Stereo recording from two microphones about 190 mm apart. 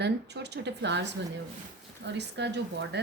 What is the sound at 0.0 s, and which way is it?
Speech, 60° right (ahead or behind).